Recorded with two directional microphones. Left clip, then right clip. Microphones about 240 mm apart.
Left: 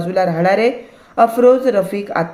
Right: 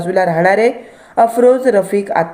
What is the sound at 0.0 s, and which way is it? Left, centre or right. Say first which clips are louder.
A woman's voice: right 3 dB; centre.